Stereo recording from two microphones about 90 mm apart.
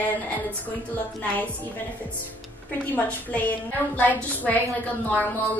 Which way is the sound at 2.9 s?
20° left (ahead or behind).